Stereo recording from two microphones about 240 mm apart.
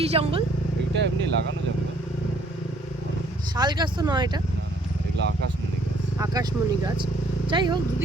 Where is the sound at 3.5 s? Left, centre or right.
Centre.